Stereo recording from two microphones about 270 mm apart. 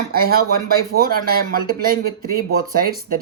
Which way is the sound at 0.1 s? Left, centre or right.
Right.